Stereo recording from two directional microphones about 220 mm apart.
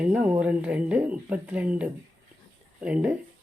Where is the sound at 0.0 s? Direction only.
5° right (ahead or behind).